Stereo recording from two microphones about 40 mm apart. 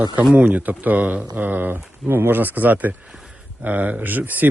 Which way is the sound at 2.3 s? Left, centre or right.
Right.